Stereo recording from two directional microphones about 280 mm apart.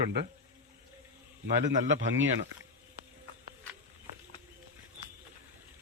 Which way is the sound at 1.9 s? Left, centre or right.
Right.